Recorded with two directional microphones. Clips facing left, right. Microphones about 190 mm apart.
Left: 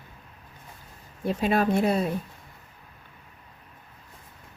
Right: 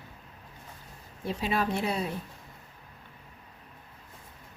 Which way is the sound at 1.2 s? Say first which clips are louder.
Left 6 dB; 50° left (ahead or behind).